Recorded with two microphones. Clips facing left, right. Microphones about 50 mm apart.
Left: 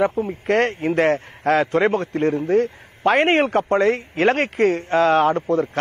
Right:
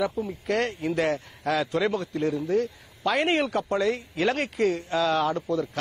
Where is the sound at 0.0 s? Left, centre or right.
Left.